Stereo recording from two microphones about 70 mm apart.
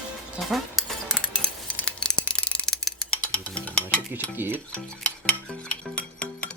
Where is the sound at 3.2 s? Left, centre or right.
Centre.